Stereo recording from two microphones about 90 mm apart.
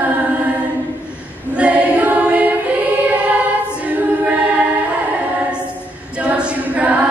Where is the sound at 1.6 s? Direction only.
15° right (ahead or behind).